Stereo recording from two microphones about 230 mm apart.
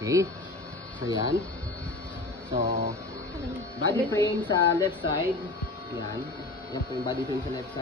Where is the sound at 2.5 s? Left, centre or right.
Right.